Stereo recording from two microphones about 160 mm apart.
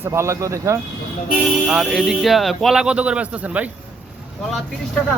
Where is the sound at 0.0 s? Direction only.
15° right (ahead or behind).